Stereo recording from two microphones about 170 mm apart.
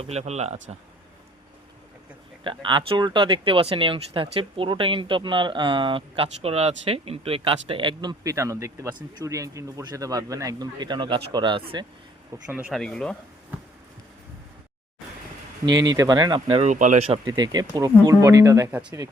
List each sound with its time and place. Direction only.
0.0 s speech: 40° right (ahead or behind)
2.4 s speech: 30° right (ahead or behind)
12.5 s speech: 10° right (ahead or behind)
12.7 s speech: 5° left (ahead or behind)
15.6 s speech: 90° right
15.9 s speech: 25° right (ahead or behind)
16.6 s speech: 50° right (ahead or behind)
17.1 s speech: 25° right (ahead or behind)